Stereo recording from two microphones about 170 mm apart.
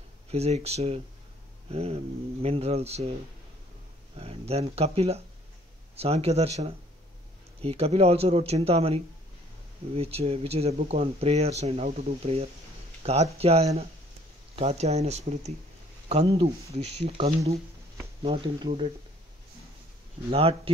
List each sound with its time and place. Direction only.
0.3 s speech: 40° right (ahead or behind)
4.2 s speech: 35° right (ahead or behind)
20.2 s speech: 35° right (ahead or behind)